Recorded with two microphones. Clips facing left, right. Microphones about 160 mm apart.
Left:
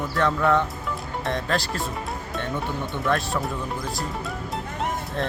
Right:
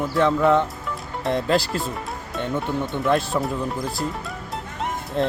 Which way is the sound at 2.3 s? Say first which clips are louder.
Right 5 dB; centre (ahead or behind).